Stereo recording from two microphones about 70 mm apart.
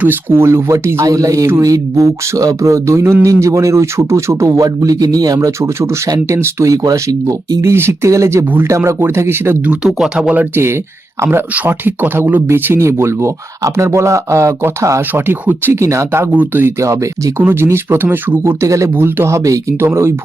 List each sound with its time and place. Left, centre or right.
0.0 s speech: right
1.0 s a man's voice: right
5.5 s a man's voice: right
7.1 s speech: right
7.6 s a man's voice: right
10.0 s speech: centre
10.5 s speech: right
15.1 s speech: right
15.8 s a man's voice: right
16.3 s speech: right
16.8 s a man's voice: right
17.5 s speech: right
18.9 s speech: right